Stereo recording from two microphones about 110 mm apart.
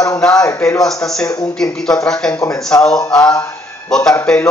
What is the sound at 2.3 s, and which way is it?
Speech, 25° left (ahead or behind).